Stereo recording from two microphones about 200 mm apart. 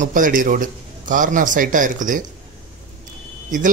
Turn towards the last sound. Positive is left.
turn(degrees=-40)  # may be behind; listen again after turning